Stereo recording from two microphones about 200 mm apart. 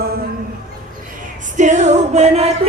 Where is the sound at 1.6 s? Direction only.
35° right (ahead or behind).